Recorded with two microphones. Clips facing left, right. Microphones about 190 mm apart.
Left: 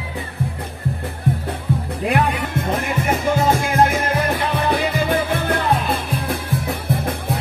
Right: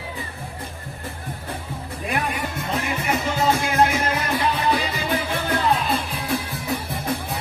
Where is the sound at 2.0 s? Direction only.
65° left (ahead or behind).